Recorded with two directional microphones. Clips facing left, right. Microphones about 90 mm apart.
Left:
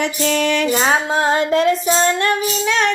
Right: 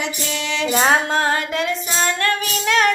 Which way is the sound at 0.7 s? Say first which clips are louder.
Right 4 dB; centre (ahead or behind).